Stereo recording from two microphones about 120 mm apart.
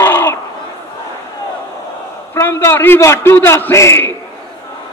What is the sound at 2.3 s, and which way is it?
Speech, 20° left (ahead or behind).